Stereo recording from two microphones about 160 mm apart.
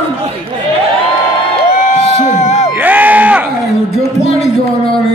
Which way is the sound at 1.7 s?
50° left (ahead or behind).